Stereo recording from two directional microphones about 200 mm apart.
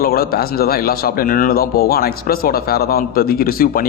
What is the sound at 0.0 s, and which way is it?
A man's voice, 50° left (ahead or behind).